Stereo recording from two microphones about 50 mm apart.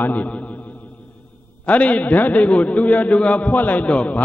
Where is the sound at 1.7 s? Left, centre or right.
Left.